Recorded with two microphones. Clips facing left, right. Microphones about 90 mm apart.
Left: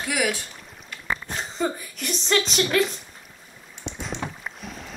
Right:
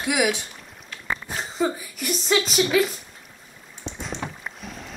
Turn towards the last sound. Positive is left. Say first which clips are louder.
# even
turn(degrees=0)  # may be behind; listen again after turning